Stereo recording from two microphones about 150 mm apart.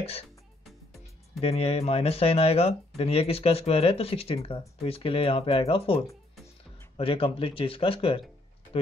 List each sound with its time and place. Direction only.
1.4 s speech: 40° left (ahead or behind)
7.0 s speech: 40° left (ahead or behind)